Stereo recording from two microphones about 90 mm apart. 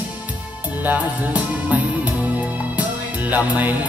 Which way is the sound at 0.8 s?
15° right (ahead or behind).